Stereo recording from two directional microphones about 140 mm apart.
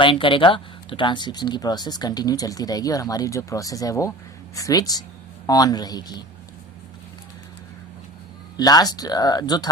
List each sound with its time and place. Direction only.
0.0 s speech: 35° left (ahead or behind)
8.5 s speech: 30° left (ahead or behind)